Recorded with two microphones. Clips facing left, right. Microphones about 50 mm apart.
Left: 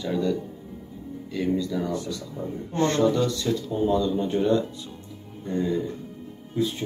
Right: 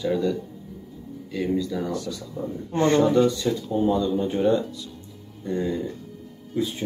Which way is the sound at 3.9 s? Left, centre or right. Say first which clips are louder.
Even; centre.